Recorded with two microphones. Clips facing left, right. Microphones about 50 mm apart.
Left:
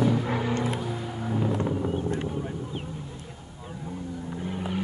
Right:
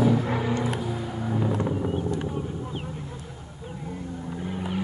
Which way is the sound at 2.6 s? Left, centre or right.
Centre.